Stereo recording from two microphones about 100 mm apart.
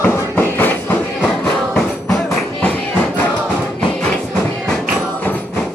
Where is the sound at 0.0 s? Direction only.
20° left (ahead or behind).